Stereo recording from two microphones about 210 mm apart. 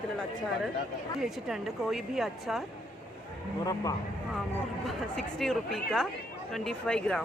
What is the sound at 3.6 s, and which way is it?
Speech, 15° left (ahead or behind).